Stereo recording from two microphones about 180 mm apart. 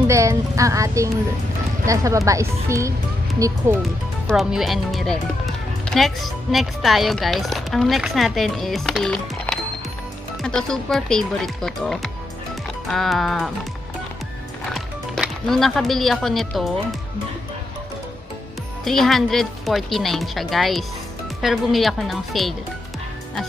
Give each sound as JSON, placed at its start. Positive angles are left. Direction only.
{"t": 0.0, "sound": "speech", "side_deg": -15}
{"t": 4.3, "sound": "speech", "side_deg": 0}
{"t": 14.7, "sound": "speech", "side_deg": 0}
{"t": 18.9, "sound": "speech", "side_deg": 0}